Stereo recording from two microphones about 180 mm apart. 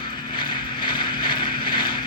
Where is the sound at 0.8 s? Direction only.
25° left (ahead or behind).